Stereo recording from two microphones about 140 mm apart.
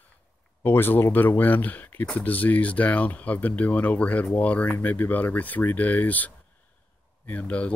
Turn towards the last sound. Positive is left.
turn(degrees=10)  # may be behind; listen again after turning